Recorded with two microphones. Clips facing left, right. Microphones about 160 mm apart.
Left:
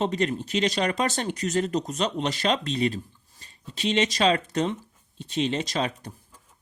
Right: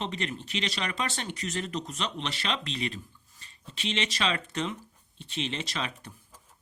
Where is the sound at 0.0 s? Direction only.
40° left (ahead or behind).